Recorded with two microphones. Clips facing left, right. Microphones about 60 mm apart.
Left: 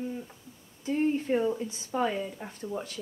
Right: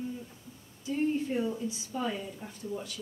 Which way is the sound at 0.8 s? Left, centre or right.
Left.